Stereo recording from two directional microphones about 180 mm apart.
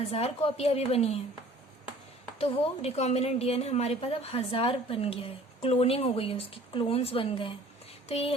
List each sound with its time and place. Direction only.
0.1 s a woman's voice: 35° left (ahead or behind)
2.4 s a woman's voice: 35° left (ahead or behind)